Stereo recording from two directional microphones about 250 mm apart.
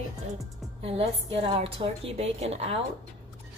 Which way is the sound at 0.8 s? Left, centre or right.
Right.